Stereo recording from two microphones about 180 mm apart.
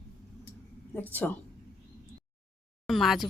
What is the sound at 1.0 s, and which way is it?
Speech, 10° left (ahead or behind).